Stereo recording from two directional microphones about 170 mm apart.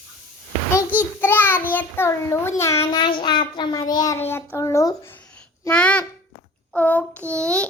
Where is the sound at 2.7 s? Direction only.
30° left (ahead or behind); by 7.7 s 5° left (ahead or behind).